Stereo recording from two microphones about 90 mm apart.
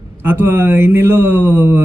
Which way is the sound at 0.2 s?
25° right (ahead or behind).